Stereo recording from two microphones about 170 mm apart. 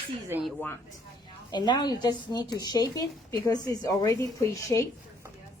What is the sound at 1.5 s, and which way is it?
Speech, 25° left (ahead or behind).